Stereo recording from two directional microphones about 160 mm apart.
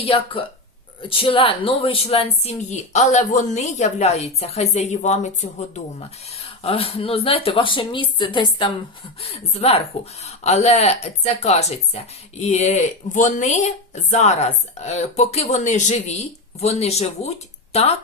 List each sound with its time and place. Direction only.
0.0 s speech: 35° left (ahead or behind)